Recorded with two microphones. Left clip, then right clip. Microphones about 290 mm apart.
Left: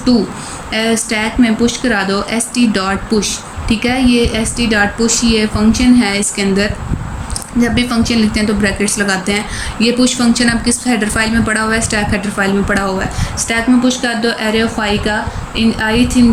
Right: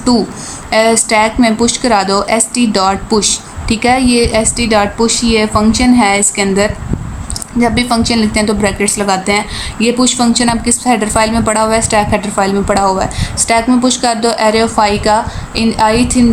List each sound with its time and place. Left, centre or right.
0.7 s a woman's voice: centre